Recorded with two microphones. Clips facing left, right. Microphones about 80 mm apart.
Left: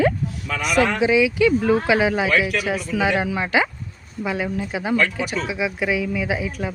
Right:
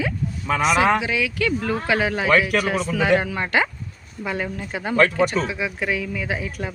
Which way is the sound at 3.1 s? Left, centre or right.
Centre.